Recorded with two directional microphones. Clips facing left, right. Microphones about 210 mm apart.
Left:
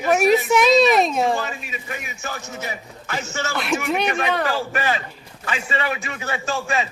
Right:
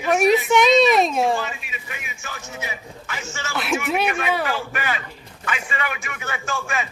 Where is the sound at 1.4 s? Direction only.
40° left (ahead or behind).